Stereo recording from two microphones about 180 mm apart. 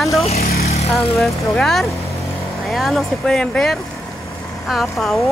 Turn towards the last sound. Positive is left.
turn(degrees=0)  # may be behind; listen again after turning